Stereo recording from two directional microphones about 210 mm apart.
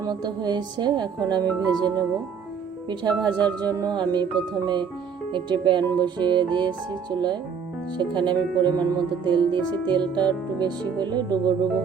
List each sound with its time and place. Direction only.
0.0 s music: 20° right (ahead or behind)